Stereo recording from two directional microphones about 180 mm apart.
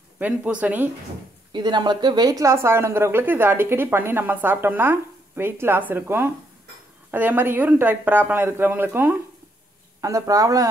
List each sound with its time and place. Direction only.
0.2 s a woman's voice: 10° right (ahead or behind)
1.5 s a woman's voice: 25° right (ahead or behind)